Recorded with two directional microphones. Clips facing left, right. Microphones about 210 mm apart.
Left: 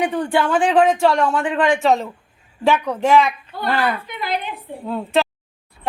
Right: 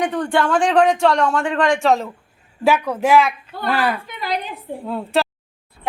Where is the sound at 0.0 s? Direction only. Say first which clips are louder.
Even; 5° left (ahead or behind).